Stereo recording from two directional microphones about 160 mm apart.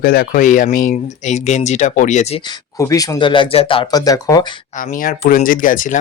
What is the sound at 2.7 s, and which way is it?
Speech, 20° left (ahead or behind).